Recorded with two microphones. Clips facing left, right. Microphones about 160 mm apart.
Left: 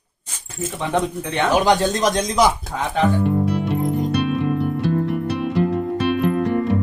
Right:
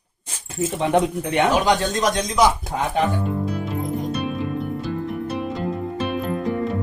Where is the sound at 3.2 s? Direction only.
70° left (ahead or behind).